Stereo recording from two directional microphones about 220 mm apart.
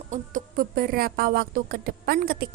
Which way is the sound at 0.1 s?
40° right (ahead or behind).